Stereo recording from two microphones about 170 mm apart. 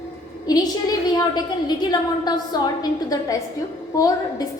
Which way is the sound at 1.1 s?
25° left (ahead or behind).